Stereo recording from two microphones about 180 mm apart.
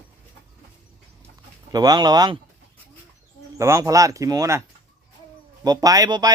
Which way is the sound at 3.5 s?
15° right (ahead or behind).